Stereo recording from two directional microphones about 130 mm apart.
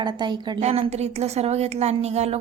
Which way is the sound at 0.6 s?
55° right (ahead or behind).